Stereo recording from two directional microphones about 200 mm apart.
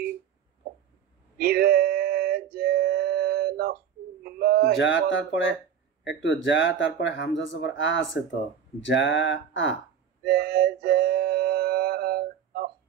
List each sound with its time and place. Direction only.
1.4 s a sound: 50° right (ahead or behind)
4.7 s speech: 65° left (ahead or behind)
10.2 s music: 50° right (ahead or behind)